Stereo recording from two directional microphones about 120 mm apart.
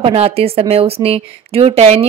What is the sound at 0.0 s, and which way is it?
Speech, 55° right (ahead or behind).